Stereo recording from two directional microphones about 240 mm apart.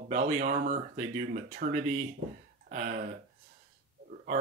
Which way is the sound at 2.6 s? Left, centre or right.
Right.